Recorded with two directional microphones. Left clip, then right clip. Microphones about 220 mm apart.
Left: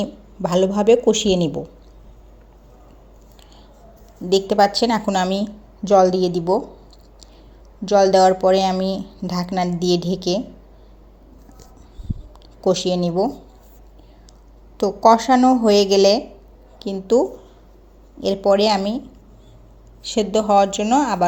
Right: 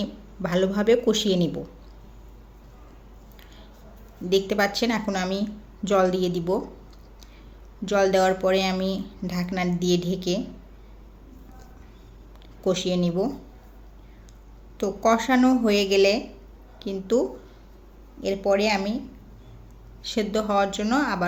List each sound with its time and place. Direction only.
0.0 s speech: 20° left (ahead or behind)
4.3 s speech: 20° left (ahead or behind)
7.9 s speech: 15° left (ahead or behind)
12.6 s speech: 20° left (ahead or behind)
15.0 s a woman's voice: 20° left (ahead or behind)